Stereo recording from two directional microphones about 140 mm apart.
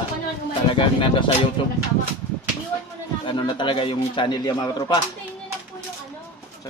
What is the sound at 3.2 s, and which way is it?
Speech, 35° left (ahead or behind).